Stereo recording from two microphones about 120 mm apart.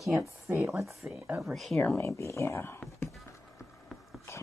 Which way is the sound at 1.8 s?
15° left (ahead or behind).